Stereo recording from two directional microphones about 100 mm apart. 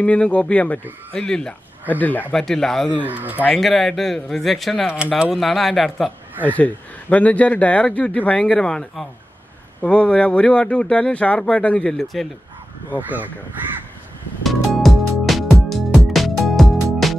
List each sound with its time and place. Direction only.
0.0 s speech: 15° left (ahead or behind)
2.3 s speech: 5° left (ahead or behind)
3.0 s speech: 15° right (ahead or behind)
3.5 s speech: 5° left (ahead or behind)
6.4 s speech: 15° left (ahead or behind)
14.4 s music: centre (ahead or behind)